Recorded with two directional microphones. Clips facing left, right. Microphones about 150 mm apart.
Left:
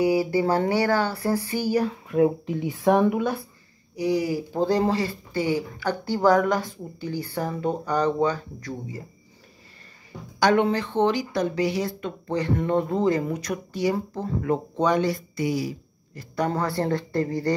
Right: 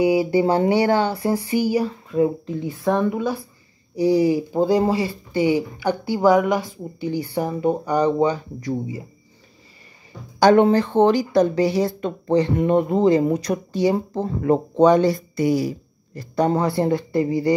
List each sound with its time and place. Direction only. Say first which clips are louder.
0.0 s speech: right 4 dB; 20° right (ahead or behind)
1.9 s speech: right 1 dB; 5° left (ahead or behind)
3.9 s speech: right 7 dB; 30° right (ahead or behind)
4.5 s speech: right 4 dB; 10° right (ahead or behind)
10.4 s speech: right 6 dB; 40° right (ahead or behind)
16.2 s speech: right 6 dB; 25° right (ahead or behind)